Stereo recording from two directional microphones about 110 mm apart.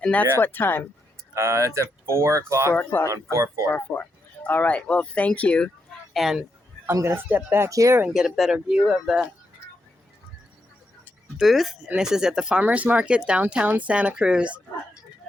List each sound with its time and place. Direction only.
0.0 s speech: 15° left (ahead or behind)
1.3 s speech: 25° right (ahead or behind)
2.7 s speech: 20° left (ahead or behind)
3.3 s speech: 25° right (ahead or behind)
3.7 s speech: 20° left (ahead or behind)
6.1 s speech: centre (ahead or behind)
6.9 s speech: 25° right (ahead or behind)
8.0 s speech: 5° right (ahead or behind)
11.3 s speech: centre (ahead or behind)